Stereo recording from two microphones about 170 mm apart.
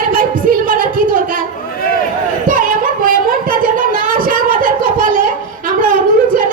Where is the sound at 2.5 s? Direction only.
55° right (ahead or behind).